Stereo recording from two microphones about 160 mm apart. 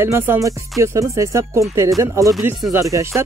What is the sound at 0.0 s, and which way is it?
Speech, 15° right (ahead or behind).